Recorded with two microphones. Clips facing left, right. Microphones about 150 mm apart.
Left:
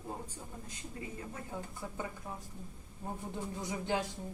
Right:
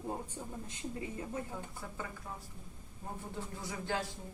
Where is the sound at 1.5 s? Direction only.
10° left (ahead or behind).